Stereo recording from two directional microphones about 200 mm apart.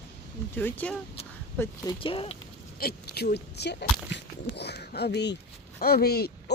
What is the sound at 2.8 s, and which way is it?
Speech, 50° left (ahead or behind).